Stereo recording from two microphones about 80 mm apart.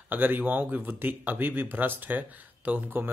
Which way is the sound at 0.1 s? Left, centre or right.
Right.